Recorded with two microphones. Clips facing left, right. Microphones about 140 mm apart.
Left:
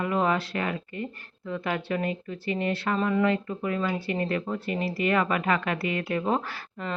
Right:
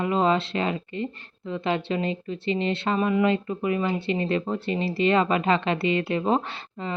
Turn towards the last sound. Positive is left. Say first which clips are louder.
# right 1 dB
turn(degrees=-25)  # may be behind; listen again after turning